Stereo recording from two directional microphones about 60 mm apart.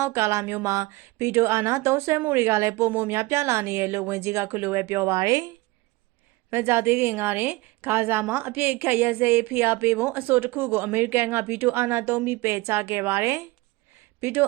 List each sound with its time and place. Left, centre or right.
0.0 s speech: right
5.1 s speech: right
6.5 s a woman's voice: right